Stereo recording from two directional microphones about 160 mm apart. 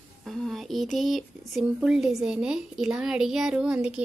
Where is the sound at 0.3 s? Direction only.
Centre (ahead or behind).